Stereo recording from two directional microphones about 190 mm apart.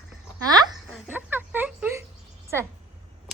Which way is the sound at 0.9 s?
10° right (ahead or behind).